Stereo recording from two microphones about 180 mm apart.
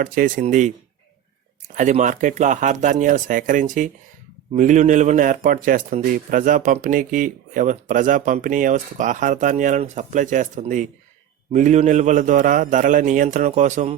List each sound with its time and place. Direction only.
0.0 s speech: 50° right (ahead or behind)